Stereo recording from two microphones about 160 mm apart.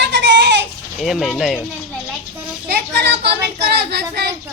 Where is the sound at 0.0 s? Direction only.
90° right.